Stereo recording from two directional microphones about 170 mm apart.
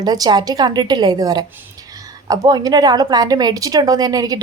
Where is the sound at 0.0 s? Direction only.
25° right (ahead or behind).